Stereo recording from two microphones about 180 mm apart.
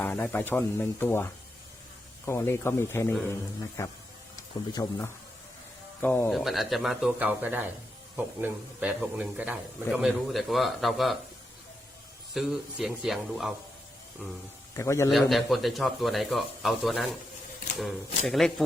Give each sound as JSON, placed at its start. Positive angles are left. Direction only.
{"t": 0.0, "sound": "speech", "side_deg": 10}
{"t": 6.3, "sound": "speech", "side_deg": 0}
{"t": 12.3, "sound": "speech", "side_deg": 0}
{"t": 14.8, "sound": "speech", "side_deg": 15}
{"t": 15.1, "sound": "speech", "side_deg": 0}
{"t": 18.3, "sound": "speech", "side_deg": 0}